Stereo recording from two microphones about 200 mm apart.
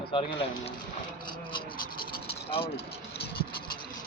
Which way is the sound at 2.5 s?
25° left (ahead or behind).